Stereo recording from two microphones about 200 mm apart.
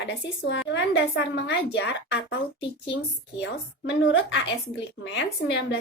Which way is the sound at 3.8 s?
75° left (ahead or behind).